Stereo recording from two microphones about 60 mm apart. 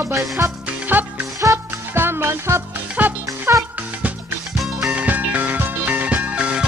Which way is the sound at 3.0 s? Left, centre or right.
Right.